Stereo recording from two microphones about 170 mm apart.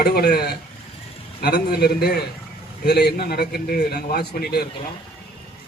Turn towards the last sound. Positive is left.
turn(degrees=70)  # may be behind; listen again after turning